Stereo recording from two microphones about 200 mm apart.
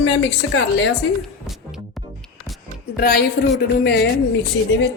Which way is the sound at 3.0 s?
50° left (ahead or behind).